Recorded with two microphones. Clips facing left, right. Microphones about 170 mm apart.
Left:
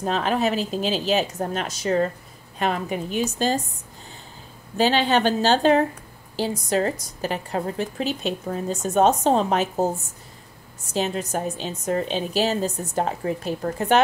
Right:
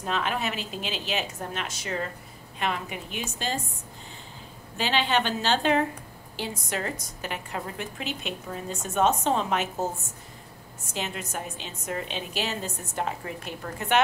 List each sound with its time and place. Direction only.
0.0 s a woman's voice: 35° left (ahead or behind)
4.7 s a woman's voice: 40° left (ahead or behind)
10.9 s a woman's voice: 35° left (ahead or behind)